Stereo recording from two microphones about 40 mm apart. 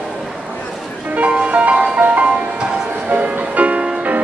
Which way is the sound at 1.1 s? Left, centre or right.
Right.